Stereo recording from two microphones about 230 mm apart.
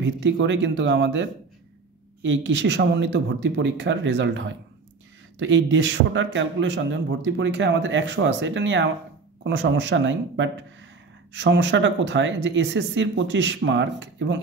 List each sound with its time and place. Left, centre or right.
0.0 s a man's voice: right